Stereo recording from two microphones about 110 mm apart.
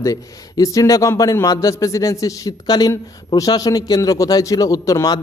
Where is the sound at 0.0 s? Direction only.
30° left (ahead or behind).